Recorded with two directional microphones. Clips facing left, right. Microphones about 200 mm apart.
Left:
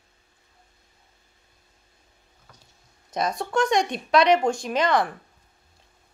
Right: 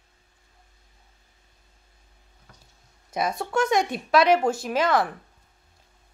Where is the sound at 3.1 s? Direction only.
5° right (ahead or behind).